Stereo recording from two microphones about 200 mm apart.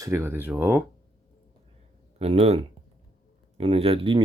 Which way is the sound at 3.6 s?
30° right (ahead or behind).